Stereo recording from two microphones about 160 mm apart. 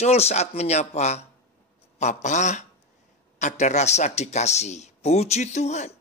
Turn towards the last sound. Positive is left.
turn(degrees=45)  # may be behind; listen again after turning